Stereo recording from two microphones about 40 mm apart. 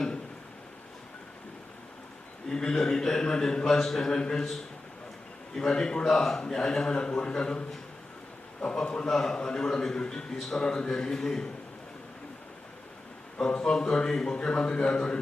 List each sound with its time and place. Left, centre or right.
2.5 s a man's voice: centre
5.5 s a man's voice: left
8.8 s a man's voice: left
10.3 s a man's voice: centre
10.6 s a man's voice: centre
13.4 s a man's voice: left